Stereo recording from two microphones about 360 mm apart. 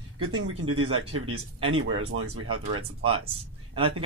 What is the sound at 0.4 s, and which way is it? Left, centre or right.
Speech, right.